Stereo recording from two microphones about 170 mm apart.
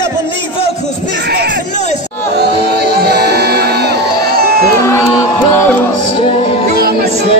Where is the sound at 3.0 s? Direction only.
75° right (ahead or behind).